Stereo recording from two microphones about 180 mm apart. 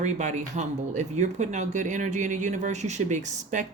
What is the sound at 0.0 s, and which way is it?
Speech, 40° right (ahead or behind).